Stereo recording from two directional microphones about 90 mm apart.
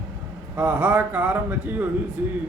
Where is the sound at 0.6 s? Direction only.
15° right (ahead or behind).